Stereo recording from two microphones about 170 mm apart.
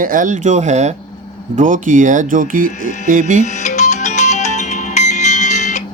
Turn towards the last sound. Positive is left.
turn(degrees=45)  # may be behind; listen again after turning